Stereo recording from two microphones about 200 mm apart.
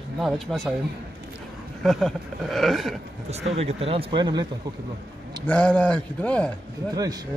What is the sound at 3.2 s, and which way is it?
Speech, 30° right (ahead or behind).